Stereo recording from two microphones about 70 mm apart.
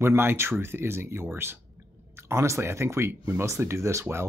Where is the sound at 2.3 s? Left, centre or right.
Right.